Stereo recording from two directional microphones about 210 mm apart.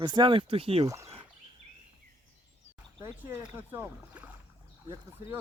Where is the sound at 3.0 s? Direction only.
10° right (ahead or behind).